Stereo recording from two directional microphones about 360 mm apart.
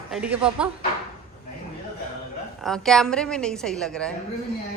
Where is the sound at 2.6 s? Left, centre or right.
Centre.